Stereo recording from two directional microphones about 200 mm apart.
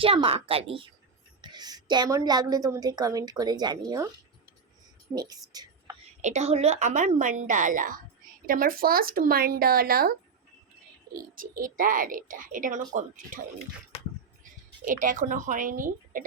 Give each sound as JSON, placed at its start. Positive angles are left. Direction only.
{"t": 0.0, "sound": "a woman's voice", "side_deg": -25}
{"t": 5.1, "sound": "a woman's voice", "side_deg": -20}
{"t": 6.2, "sound": "a woman's voice", "side_deg": -35}
{"t": 11.3, "sound": "a woman's voice", "side_deg": -45}
{"t": 14.8, "sound": "a woman's voice", "side_deg": -40}